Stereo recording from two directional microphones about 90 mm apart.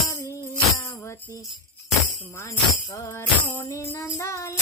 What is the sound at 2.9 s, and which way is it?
Music, 30° left (ahead or behind).